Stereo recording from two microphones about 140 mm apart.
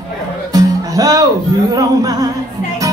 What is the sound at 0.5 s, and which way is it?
Music, 25° right (ahead or behind).